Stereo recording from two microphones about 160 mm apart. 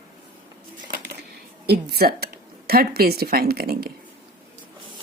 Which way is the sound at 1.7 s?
75° right (ahead or behind).